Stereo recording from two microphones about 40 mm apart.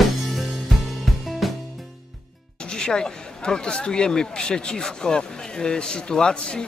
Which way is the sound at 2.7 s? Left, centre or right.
Centre.